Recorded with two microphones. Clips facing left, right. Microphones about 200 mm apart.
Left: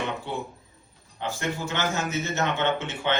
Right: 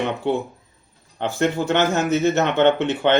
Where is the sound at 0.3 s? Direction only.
65° right (ahead or behind).